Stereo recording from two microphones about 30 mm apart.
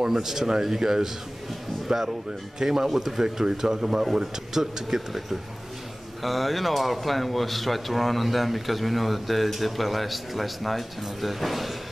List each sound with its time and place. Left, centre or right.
0.0 s speech: centre
3.2 s speech: centre